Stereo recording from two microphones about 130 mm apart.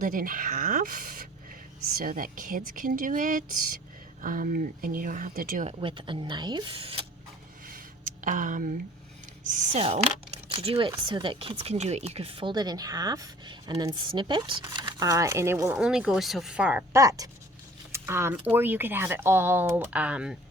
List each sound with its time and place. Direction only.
0.0 s speech: 90° right
5.6 s speech: 40° right (ahead or behind)
7.7 s a sound: 90° right
9.8 s speech: 55° right (ahead or behind); by 15.8 s 20° right (ahead or behind)
15.8 s speech: 5° right (ahead or behind)
17.0 s speech: 25° right (ahead or behind); by 20.3 s 10° right (ahead or behind)